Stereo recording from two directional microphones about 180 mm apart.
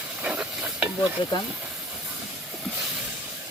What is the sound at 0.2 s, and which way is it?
Stir, 5° right (ahead or behind).